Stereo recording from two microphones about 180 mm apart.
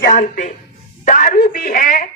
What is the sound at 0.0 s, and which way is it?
Speech, 50° left (ahead or behind).